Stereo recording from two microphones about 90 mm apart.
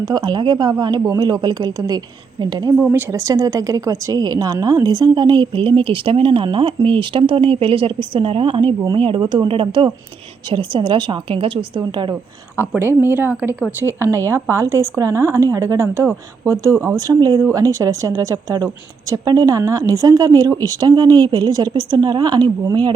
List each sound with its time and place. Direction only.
0.0 s a woman's voice: 55° right (ahead or behind)
2.9 s speech: 35° right (ahead or behind); by 9.9 s 75° right (ahead or behind)
10.5 s a woman's voice: 65° right (ahead or behind)
12.8 s speech: 25° right (ahead or behind)
14.3 s speech: 30° right (ahead or behind)
17.1 s a woman's voice: 45° right (ahead or behind)